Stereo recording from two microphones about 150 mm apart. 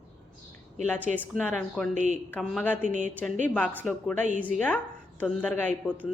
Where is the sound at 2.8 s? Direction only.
55° right (ahead or behind).